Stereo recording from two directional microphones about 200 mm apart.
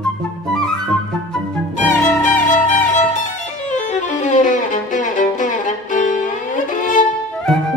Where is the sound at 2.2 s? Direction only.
40° left (ahead or behind).